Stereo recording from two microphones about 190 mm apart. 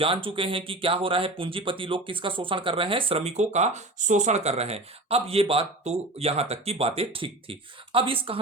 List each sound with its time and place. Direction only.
0.0 s speech: 25° right (ahead or behind)